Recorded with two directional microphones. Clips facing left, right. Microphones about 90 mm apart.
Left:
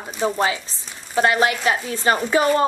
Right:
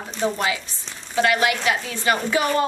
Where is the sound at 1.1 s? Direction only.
35° left (ahead or behind).